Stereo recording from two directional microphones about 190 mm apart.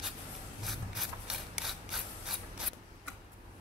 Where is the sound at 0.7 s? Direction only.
5° right (ahead or behind).